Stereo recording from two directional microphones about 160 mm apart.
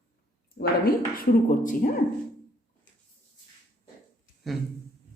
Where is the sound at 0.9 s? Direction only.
60° left (ahead or behind).